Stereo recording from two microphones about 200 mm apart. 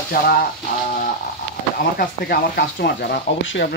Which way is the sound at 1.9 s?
50° left (ahead or behind).